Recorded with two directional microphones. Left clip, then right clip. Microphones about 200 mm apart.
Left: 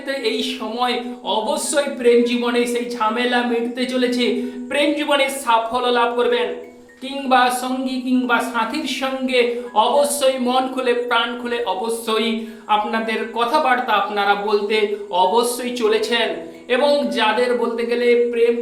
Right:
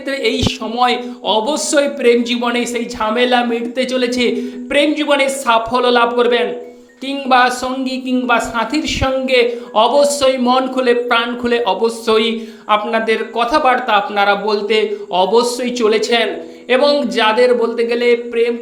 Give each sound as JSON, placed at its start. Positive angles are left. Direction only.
{"t": 0.1, "sound": "a woman's voice", "side_deg": -35}